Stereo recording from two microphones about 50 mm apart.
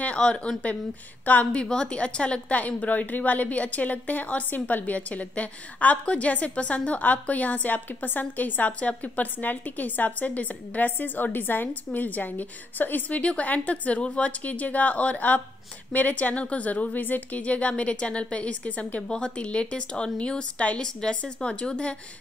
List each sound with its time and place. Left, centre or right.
0.0 s a woman's voice: left
13.2 s a woman's voice: left